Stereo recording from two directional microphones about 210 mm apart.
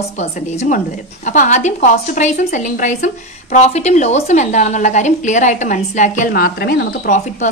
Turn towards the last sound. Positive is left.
turn(degrees=40)  # may be behind; listen again after turning